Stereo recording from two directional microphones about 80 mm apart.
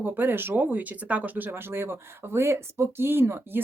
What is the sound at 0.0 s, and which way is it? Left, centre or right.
Speech, right.